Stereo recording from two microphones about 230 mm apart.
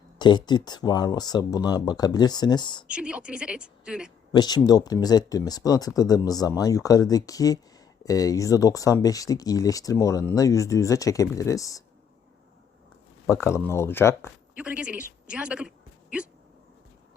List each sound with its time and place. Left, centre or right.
0.2 s speech: centre
2.8 s a woman's voice: centre
4.3 s speech: centre
13.2 s speech: centre
14.3 s speech: centre